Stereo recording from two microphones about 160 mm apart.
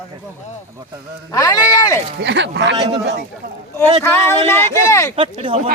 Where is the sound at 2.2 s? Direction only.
90° right.